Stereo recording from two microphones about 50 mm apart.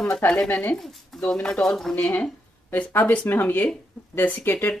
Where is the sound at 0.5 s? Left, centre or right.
Left.